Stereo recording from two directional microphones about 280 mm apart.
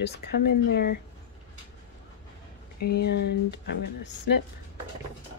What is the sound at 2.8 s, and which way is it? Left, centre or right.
Speech, left.